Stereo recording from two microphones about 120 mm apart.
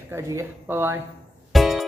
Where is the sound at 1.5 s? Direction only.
Centre (ahead or behind).